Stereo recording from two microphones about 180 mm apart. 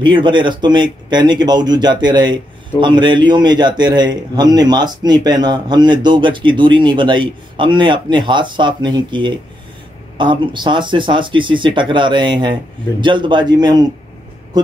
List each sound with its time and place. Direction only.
0.0 s speech: 25° right (ahead or behind)